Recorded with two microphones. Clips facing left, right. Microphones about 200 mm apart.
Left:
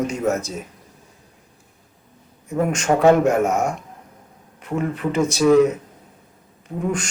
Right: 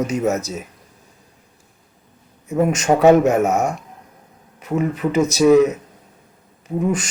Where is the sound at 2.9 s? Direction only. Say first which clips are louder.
Right 2 dB; 20° right (ahead or behind).